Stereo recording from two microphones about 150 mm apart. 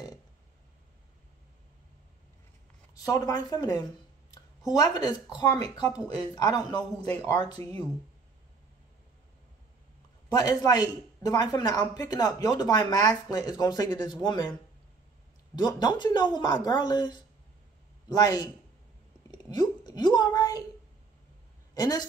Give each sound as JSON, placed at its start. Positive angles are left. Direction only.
{"t": 2.9, "sound": "speech", "side_deg": 20}
{"t": 10.3, "sound": "speech", "side_deg": 25}
{"t": 15.5, "sound": "speech", "side_deg": 30}
{"t": 19.3, "sound": "a sound", "side_deg": 30}
{"t": 21.7, "sound": "speech", "side_deg": 25}